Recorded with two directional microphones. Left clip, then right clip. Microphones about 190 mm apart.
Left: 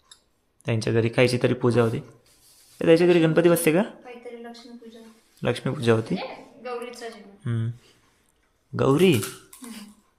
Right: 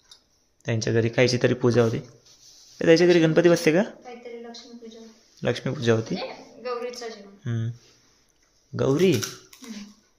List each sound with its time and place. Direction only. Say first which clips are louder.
0.6 s speech: even; 5° left (ahead or behind)
5.4 s speech: even; 5° left (ahead or behind)
6.1 s a sound: even; 20° right (ahead or behind)
7.4 s speech: left 1 dB; 5° left (ahead or behind)
8.7 s speech: left 2 dB; 10° left (ahead or behind)